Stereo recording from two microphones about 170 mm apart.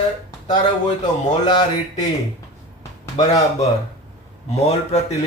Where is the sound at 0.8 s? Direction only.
45° left (ahead or behind).